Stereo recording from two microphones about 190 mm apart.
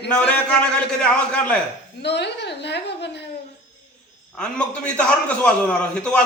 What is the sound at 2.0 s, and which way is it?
A woman's voice, 65° left (ahead or behind).